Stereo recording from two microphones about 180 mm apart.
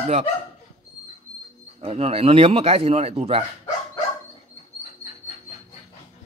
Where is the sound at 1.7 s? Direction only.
35° right (ahead or behind).